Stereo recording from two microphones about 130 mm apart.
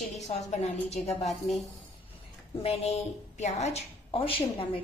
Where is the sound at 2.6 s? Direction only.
55° left (ahead or behind).